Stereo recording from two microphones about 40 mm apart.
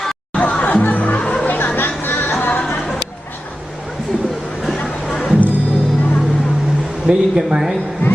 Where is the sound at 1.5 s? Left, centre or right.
Left.